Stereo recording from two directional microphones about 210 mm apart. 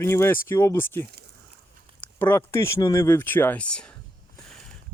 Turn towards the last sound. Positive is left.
turn(degrees=5)  # may be behind; listen again after turning